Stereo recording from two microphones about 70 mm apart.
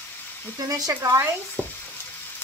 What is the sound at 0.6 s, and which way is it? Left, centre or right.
Speech, right.